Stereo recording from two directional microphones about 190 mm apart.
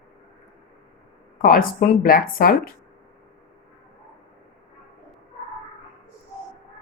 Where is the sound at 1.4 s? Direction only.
50° left (ahead or behind).